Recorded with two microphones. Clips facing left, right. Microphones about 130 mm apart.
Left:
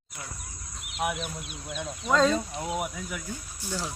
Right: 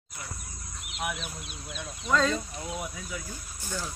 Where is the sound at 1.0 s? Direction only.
10° left (ahead or behind).